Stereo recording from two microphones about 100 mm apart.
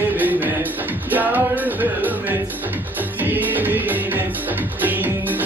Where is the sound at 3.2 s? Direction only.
20° right (ahead or behind).